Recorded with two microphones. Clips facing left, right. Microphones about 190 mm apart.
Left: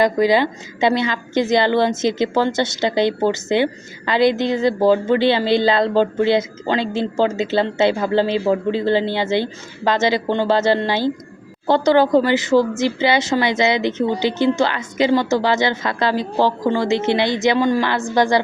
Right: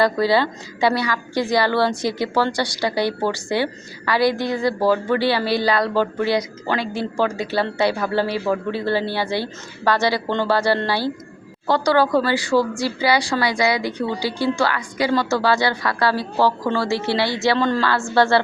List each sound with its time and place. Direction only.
0.0 s a woman's voice: 15° left (ahead or behind)